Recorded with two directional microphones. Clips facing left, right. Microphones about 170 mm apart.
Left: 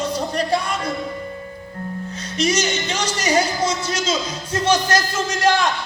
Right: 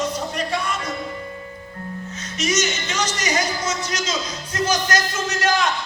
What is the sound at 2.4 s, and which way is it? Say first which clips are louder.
Speech: left 3 dB; 30° left (ahead or behind).